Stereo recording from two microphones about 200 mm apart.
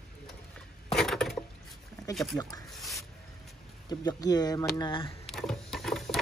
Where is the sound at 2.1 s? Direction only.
20° left (ahead or behind).